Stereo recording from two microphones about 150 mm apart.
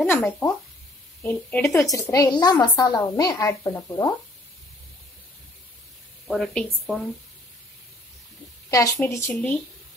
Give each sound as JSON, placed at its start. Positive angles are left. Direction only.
{"t": 0.0, "sound": "a woman's voice", "side_deg": 15}
{"t": 1.9, "sound": "a woman's voice", "side_deg": 20}
{"t": 6.2, "sound": "speech", "side_deg": 0}
{"t": 8.6, "sound": "a woman's voice", "side_deg": 20}
{"t": 9.3, "sound": "a woman's voice", "side_deg": 10}